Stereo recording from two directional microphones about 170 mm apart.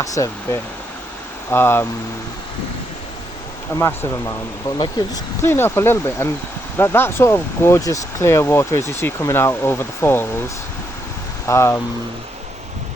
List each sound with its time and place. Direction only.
0.0 s speech: 20° left (ahead or behind)
3.8 s speech: 15° left (ahead or behind)
11.4 s speech: 15° left (ahead or behind)